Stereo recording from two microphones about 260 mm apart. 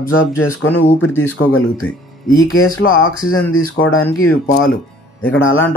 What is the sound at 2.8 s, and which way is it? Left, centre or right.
Speech, left.